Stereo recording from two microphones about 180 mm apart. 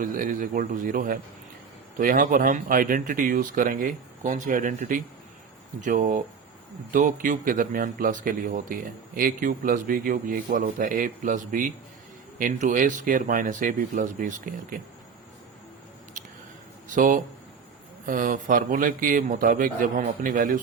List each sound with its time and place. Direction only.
0.0 s a man's voice: 50° right (ahead or behind)
16.9 s a man's voice: 45° right (ahead or behind)